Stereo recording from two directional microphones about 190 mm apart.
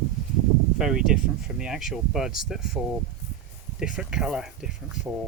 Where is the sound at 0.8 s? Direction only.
5° right (ahead or behind).